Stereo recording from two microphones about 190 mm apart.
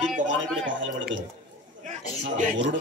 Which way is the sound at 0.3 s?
75° right (ahead or behind).